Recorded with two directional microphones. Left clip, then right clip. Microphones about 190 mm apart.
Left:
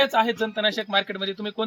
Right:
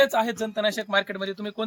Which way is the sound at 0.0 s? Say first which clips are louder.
Left 1 dB; 30° right (ahead or behind).